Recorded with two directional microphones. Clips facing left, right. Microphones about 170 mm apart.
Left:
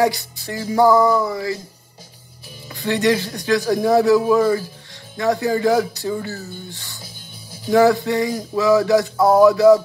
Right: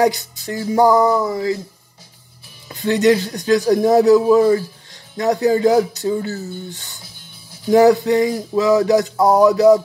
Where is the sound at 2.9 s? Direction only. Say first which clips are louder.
Right 4 dB; 20° right (ahead or behind).